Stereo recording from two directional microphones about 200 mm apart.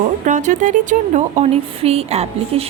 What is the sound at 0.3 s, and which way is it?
Speech, 40° right (ahead or behind).